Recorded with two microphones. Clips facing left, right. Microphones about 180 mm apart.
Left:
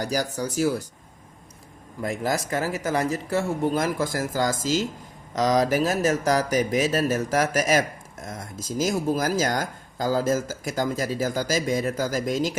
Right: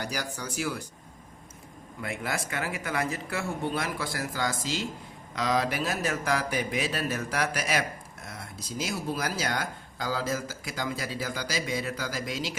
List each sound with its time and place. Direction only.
0.0 s speech: 40° left (ahead or behind)
2.0 s speech: 40° left (ahead or behind)